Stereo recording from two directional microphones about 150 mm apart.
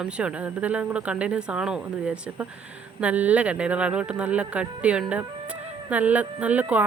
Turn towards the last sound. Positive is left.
turn(degrees=-10)  # may be behind; listen again after turning